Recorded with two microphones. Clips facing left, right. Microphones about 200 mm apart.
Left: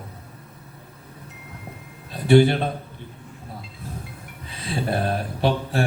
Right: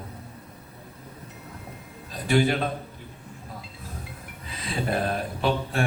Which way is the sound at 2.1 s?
30° left (ahead or behind).